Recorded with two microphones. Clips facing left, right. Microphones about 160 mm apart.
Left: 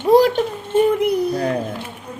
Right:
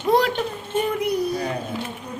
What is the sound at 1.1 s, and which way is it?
Speech, 55° left (ahead or behind).